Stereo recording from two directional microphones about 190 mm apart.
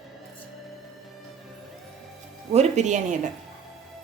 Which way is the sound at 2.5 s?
35° right (ahead or behind).